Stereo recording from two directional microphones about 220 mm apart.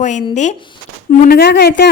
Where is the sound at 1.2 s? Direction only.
45° left (ahead or behind).